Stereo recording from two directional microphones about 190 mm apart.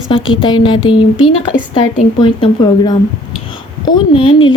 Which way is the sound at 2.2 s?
25° left (ahead or behind).